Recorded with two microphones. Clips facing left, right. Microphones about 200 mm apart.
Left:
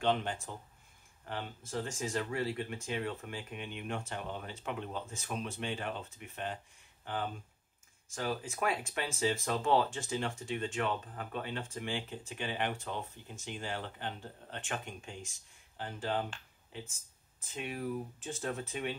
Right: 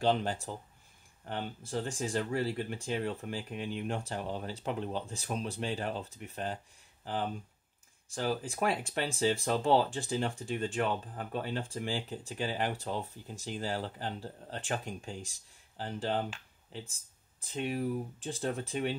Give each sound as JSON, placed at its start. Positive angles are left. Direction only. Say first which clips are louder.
{"t": 0.0, "sound": "speech", "louder": "right 3 dB", "side_deg": -35}
{"t": 8.1, "sound": "speech", "louder": "right 3 dB", "side_deg": -35}